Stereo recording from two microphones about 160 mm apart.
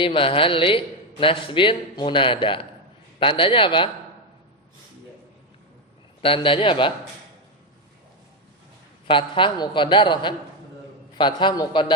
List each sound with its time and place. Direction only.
0.0 s a man's voice: 35° left (ahead or behind)
6.2 s a man's voice: 35° left (ahead or behind)
9.0 s a man's voice: 30° left (ahead or behind)